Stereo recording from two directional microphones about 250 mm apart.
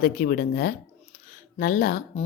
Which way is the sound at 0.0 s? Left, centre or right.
Left.